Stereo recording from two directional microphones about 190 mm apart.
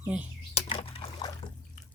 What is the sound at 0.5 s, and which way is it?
Liquid, 30° left (ahead or behind).